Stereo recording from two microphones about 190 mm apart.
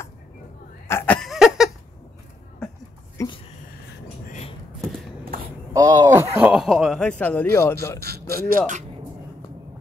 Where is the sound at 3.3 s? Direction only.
30° left (ahead or behind).